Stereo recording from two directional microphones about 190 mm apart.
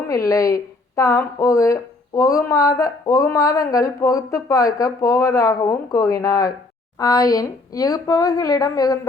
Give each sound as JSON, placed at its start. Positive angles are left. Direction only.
{"t": 0.1, "sound": "speech", "side_deg": 15}